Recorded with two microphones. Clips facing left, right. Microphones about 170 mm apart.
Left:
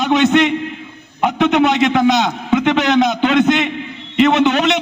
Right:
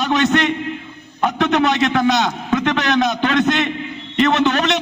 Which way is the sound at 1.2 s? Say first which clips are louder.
Left 3 dB; 20° left (ahead or behind).